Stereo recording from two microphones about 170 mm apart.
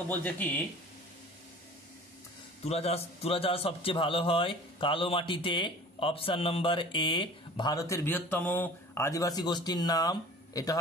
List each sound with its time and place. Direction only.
0.1 s speech: 10° left (ahead or behind)
2.6 s a man's voice: 35° left (ahead or behind); by 10.8 s 20° left (ahead or behind)